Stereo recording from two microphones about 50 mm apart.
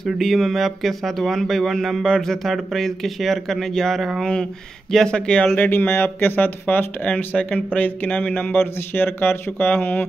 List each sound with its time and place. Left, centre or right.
0.0 s speech: centre
5.6 s speech: left
8.5 s speech: left